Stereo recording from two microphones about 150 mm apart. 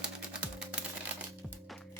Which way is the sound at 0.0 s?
5° right (ahead or behind).